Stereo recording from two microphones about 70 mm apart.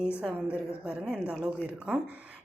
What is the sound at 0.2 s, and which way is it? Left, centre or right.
Speech, centre.